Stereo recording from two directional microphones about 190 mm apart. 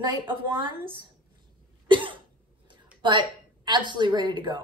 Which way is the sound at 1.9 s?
25° right (ahead or behind).